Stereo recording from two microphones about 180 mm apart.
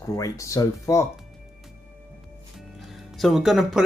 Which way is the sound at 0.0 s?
15° left (ahead or behind).